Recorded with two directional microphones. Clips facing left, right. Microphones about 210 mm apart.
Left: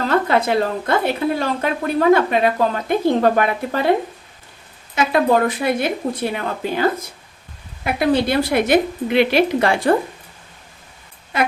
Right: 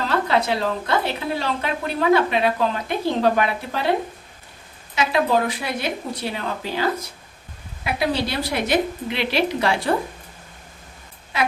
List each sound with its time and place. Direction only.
0.3 s a woman's voice: 50° left (ahead or behind)
4.9 s a woman's voice: 50° left (ahead or behind)